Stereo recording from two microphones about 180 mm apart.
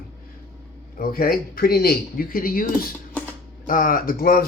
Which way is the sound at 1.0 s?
55° left (ahead or behind).